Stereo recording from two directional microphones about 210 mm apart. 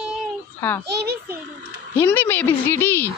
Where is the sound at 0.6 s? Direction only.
10° left (ahead or behind).